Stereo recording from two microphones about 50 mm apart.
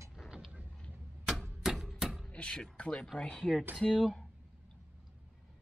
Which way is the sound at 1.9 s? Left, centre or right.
Centre.